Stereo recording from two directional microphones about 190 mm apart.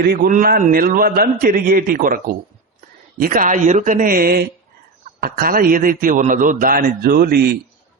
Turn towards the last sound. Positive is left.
turn(degrees=-55)  # may be behind; listen again after turning